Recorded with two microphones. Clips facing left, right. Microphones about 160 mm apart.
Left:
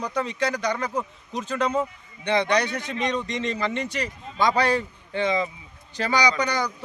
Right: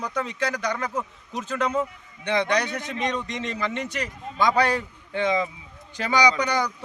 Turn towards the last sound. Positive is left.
turn(degrees=-10)  # may be behind; listen again after turning